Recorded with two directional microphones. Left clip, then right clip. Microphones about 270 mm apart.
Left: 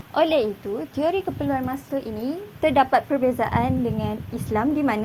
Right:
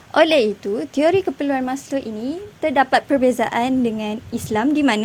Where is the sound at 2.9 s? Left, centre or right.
Right.